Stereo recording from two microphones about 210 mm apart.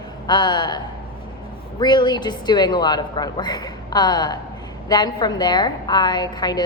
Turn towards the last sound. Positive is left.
turn(degrees=20)  # may be behind; listen again after turning